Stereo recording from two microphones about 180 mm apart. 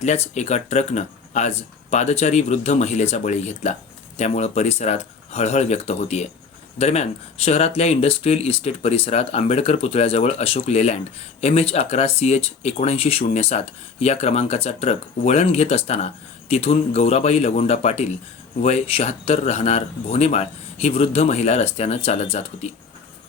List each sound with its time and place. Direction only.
0.0 s speech: 40° left (ahead or behind)